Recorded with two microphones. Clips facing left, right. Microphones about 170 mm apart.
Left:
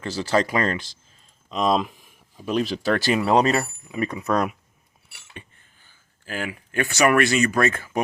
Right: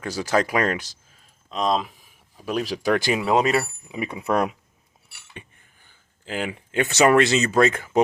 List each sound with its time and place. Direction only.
0.0 s speech: 10° right (ahead or behind)
1.5 s speech: centre (ahead or behind); by 8.0 s 20° right (ahead or behind)